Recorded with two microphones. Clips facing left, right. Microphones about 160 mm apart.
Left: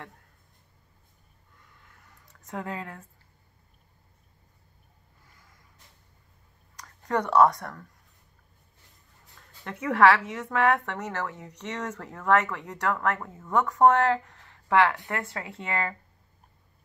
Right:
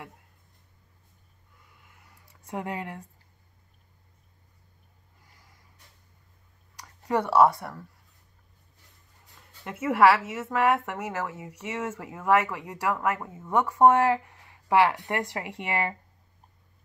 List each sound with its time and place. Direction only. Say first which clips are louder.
1.7 s a sound: even; 10° right (ahead or behind)
6.8 s speech: right 1 dB; 10° right (ahead or behind)
9.4 s a woman's voice: right 2 dB; 5° right (ahead or behind)